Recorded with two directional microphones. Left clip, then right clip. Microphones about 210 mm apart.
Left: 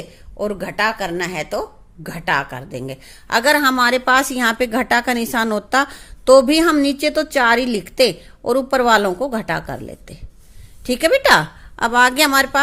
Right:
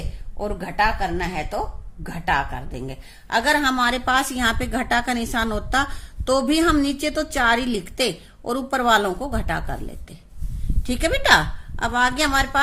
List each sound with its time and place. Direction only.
0.3 s a woman's voice: 40° left (ahead or behind)